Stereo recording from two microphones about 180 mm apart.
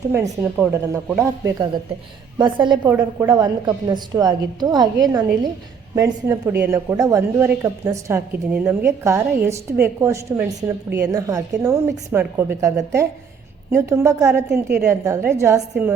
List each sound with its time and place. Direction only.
0.1 s a woman's voice: 10° right (ahead or behind)